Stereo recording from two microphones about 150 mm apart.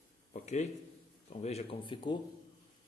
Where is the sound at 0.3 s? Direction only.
50° left (ahead or behind); by 2.1 s 35° left (ahead or behind).